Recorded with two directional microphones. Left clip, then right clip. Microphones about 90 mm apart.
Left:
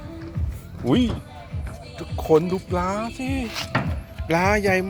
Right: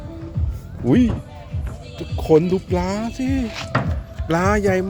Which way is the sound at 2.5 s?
90° right.